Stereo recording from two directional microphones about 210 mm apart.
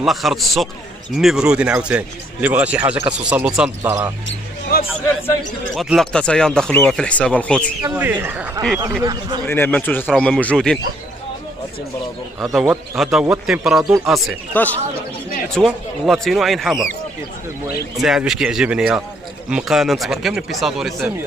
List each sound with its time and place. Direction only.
0.0 s speech: centre (ahead or behind)
4.7 s a man's voice: 45° left (ahead or behind)
5.8 s speech: centre (ahead or behind)
7.9 s speech: 10° right (ahead or behind)
9.5 s speech: 10° left (ahead or behind)
12.5 s speech: centre (ahead or behind)
17.9 s speech: centre (ahead or behind)